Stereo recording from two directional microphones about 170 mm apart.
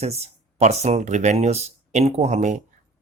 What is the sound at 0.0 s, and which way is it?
Speech, 40° right (ahead or behind).